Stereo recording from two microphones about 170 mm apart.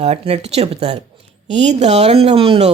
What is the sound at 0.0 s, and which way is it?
A woman's voice, 40° right (ahead or behind).